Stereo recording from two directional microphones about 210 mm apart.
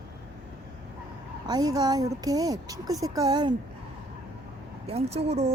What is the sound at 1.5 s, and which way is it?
Speech, 20° right (ahead or behind).